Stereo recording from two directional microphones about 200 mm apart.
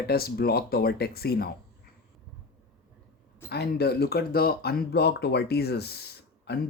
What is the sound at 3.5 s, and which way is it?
Speech, 55° left (ahead or behind).